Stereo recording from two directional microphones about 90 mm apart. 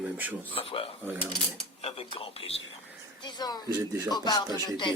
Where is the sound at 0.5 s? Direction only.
90° left.